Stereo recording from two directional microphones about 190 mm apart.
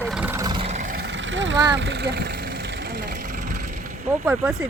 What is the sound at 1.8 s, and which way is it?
Speech, 65° right (ahead or behind).